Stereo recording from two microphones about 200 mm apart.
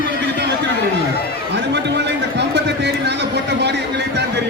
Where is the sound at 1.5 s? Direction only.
60° right (ahead or behind).